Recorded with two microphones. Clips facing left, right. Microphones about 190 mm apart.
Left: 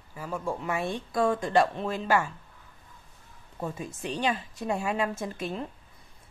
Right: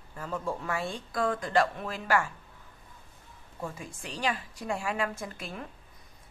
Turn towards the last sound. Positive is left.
turn(degrees=25)  # may be behind; listen again after turning